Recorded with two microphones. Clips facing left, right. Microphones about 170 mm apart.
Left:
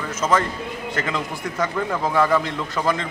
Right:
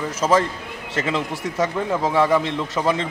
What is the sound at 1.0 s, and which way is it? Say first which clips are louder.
A man's voice: right 4 dB; 25° right (ahead or behind).